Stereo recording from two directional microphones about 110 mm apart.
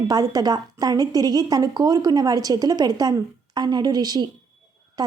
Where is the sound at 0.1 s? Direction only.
35° right (ahead or behind).